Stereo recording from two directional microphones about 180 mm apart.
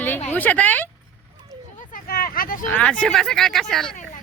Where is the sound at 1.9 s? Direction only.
55° left (ahead or behind).